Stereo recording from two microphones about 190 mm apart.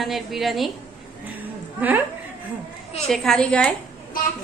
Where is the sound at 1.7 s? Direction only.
10° right (ahead or behind).